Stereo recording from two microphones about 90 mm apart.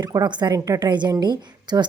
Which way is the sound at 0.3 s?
55° right (ahead or behind).